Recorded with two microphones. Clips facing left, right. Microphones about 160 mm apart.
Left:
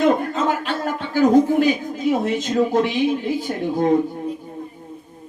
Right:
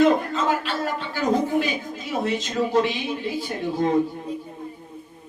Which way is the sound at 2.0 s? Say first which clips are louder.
Left 6 dB; 45° left (ahead or behind).